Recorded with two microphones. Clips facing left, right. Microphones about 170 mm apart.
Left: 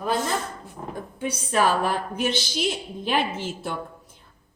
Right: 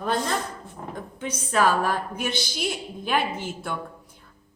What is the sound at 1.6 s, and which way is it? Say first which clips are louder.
A woman's voice: even; 15° left (ahead or behind).